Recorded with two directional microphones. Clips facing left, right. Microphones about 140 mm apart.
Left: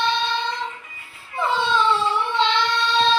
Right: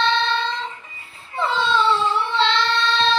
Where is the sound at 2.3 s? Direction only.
15° left (ahead or behind).